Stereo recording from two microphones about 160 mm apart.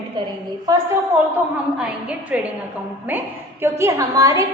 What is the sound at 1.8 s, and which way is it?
A woman's voice, 5° right (ahead or behind).